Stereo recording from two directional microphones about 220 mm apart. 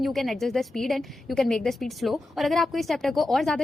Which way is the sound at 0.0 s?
Centre (ahead or behind).